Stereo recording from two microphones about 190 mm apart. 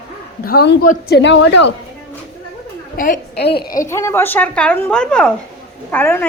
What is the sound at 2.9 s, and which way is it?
Speech, 45° left (ahead or behind).